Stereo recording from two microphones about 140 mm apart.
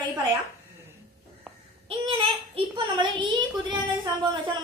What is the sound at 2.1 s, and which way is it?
Speech, 40° right (ahead or behind).